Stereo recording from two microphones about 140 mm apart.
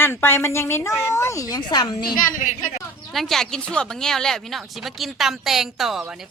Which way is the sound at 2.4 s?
70° left (ahead or behind).